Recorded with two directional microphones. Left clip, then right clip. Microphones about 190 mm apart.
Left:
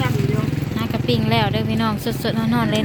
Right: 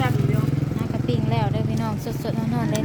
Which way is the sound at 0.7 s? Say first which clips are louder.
Left 8 dB; 10° left (ahead or behind).